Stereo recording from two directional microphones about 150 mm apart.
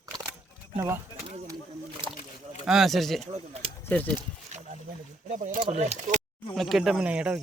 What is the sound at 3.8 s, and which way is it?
Speech, 10° left (ahead or behind).